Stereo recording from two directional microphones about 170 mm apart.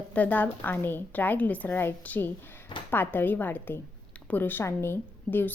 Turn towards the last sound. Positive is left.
turn(degrees=10)  # may be behind; listen again after turning